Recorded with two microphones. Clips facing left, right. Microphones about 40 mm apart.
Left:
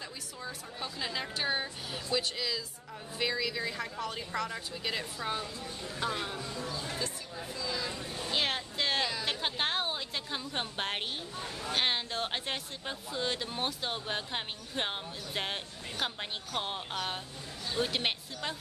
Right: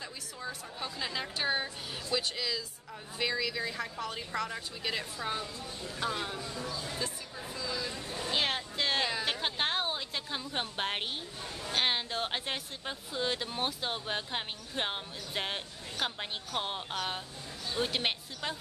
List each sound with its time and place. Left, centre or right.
0.4 s chatter: centre
0.9 s a woman's voice: centre
6.7 s speech: left
8.3 s vehicle: centre
9.2 s a sound: centre
11.7 s speech: centre